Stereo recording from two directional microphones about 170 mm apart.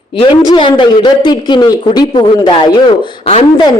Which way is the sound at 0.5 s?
30° left (ahead or behind).